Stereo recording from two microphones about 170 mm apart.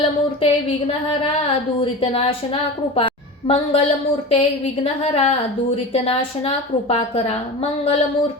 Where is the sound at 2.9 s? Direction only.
35° left (ahead or behind).